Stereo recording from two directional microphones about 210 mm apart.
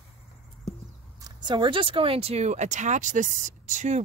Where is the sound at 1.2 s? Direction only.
20° right (ahead or behind).